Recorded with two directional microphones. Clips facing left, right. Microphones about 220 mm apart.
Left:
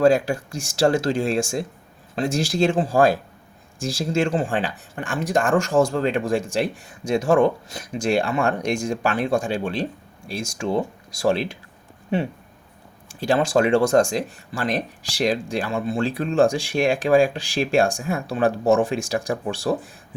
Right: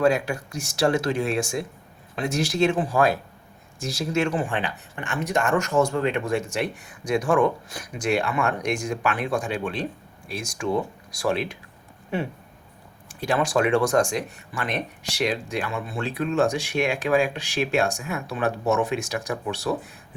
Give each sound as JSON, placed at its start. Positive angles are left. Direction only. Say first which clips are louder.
{"t": 0.1, "sound": "speech", "louder": "left 5 dB", "side_deg": 30}
{"t": 13.1, "sound": "speech", "louder": "left 4 dB", "side_deg": 30}